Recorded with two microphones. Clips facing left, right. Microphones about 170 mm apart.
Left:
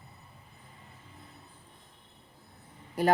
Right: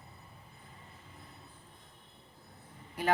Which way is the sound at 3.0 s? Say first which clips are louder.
Left 5 dB; 40° left (ahead or behind).